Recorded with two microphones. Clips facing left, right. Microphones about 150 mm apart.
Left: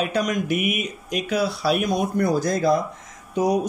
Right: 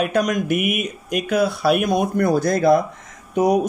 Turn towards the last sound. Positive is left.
turn(degrees=-60)  # may be behind; listen again after turning